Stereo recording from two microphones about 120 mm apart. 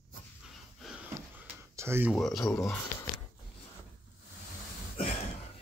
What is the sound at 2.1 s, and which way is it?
Speech, 5° left (ahead or behind).